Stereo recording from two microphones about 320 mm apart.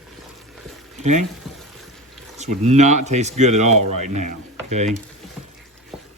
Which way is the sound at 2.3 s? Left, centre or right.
Right.